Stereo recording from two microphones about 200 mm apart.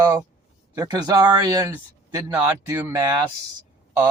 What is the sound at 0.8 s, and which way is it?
Speech, 20° right (ahead or behind).